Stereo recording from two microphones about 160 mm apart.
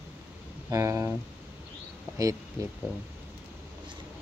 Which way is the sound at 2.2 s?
20° right (ahead or behind).